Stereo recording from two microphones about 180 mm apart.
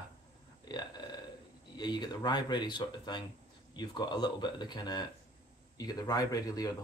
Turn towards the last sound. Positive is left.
turn(degrees=20)  # may be behind; listen again after turning